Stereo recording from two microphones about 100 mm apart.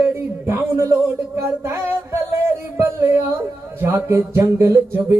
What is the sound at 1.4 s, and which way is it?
Child singing, 25° right (ahead or behind).